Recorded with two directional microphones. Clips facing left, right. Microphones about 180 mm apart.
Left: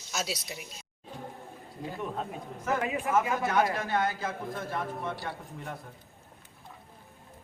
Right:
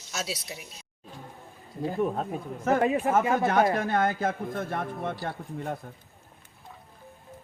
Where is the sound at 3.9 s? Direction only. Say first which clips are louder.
Right 4 dB; 55° right (ahead or behind).